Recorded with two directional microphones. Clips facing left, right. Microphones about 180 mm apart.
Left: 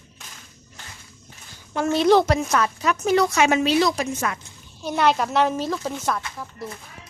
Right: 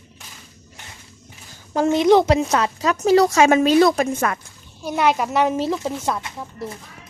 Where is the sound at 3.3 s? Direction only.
45° right (ahead or behind).